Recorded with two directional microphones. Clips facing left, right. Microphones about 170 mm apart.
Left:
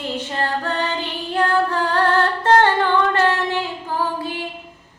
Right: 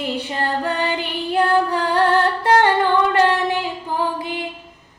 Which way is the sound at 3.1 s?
15° right (ahead or behind).